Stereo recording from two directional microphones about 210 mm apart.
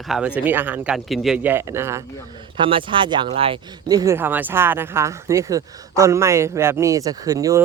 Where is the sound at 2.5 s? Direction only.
25° right (ahead or behind).